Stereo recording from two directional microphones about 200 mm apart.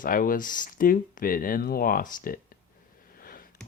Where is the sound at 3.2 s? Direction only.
45° left (ahead or behind).